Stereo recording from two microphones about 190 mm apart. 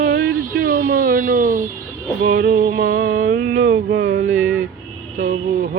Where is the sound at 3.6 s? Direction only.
80° right.